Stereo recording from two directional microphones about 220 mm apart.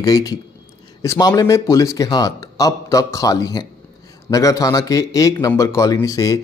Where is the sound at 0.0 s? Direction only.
15° left (ahead or behind).